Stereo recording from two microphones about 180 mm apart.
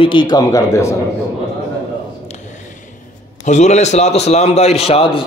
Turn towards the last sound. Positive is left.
turn(degrees=30)  # may be behind; listen again after turning